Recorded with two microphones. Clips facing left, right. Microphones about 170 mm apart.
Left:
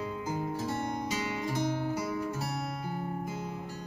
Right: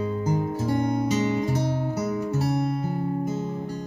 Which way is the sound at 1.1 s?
40° right (ahead or behind).